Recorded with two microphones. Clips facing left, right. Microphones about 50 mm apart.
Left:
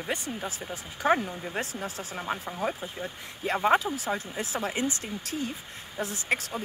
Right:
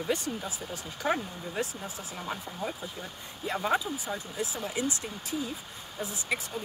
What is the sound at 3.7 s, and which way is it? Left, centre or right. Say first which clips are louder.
Speech: left 5 dB; left.